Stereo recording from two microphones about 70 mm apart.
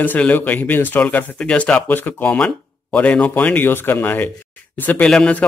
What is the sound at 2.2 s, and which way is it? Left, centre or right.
Speech, centre.